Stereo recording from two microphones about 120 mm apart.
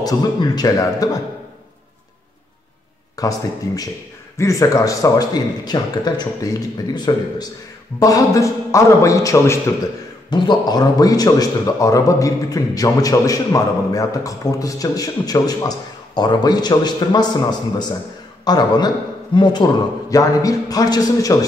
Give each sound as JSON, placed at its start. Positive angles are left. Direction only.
{"t": 0.0, "sound": "speech", "side_deg": 35}
{"t": 3.2, "sound": "speech", "side_deg": 30}
{"t": 10.3, "sound": "speech", "side_deg": 40}